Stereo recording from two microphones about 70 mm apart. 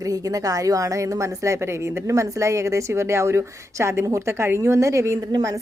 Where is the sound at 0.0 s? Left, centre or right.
Right.